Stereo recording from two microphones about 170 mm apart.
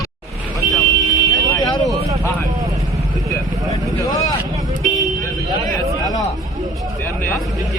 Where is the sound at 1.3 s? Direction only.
20° left (ahead or behind).